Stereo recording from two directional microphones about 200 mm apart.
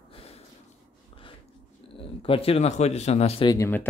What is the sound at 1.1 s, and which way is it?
Dog, 25° left (ahead or behind).